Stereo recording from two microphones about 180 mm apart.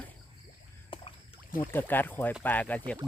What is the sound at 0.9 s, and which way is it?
Rowboat, 30° left (ahead or behind).